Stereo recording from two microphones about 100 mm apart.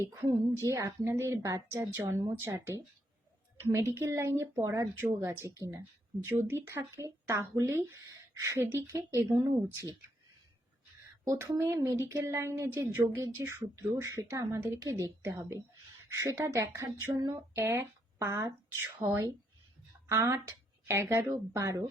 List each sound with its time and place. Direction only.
0.0 s a woman's voice: 30° right (ahead or behind)
3.8 s a woman's voice: 25° right (ahead or behind)
11.3 s a woman's voice: 35° right (ahead or behind)